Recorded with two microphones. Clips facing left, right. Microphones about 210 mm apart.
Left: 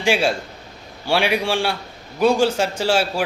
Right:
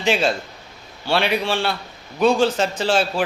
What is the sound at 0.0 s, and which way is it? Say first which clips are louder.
A man's voice: left 1 dB; 10° left (ahead or behind).